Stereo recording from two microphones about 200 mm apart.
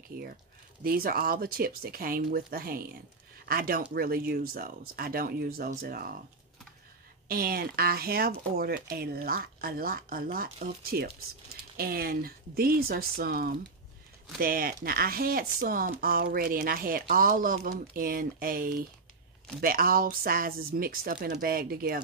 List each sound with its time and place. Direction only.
0.1 s speech: 50° right (ahead or behind)
7.2 s speech: 45° right (ahead or behind)